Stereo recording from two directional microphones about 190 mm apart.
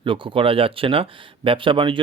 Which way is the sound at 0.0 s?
25° right (ahead or behind).